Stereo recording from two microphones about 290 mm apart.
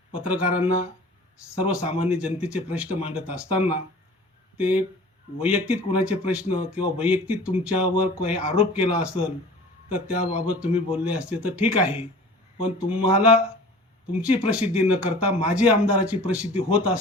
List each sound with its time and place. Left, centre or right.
0.2 s speech: centre
10.2 s a man's voice: left
10.4 s speech: centre